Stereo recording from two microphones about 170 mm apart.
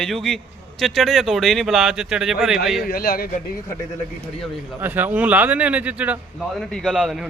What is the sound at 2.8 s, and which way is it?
Speech, 60° left (ahead or behind).